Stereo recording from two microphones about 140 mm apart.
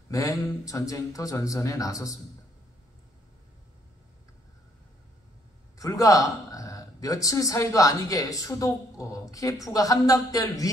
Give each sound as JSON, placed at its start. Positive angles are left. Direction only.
{"t": 0.1, "sound": "a man's voice", "side_deg": 25}
{"t": 5.8, "sound": "a man's voice", "side_deg": 25}